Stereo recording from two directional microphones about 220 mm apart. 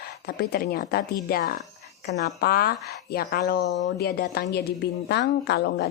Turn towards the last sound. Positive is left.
turn(degrees=50)  # may be behind; listen again after turning